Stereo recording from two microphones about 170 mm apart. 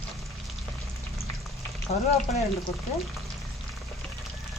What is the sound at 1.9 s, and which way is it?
Frying, 40° left (ahead or behind).